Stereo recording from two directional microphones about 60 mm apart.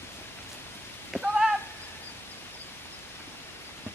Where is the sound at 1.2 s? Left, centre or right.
Centre.